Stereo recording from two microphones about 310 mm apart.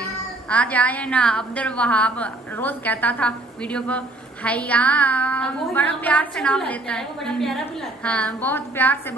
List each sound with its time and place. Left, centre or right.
0.0 s a woman's voice: centre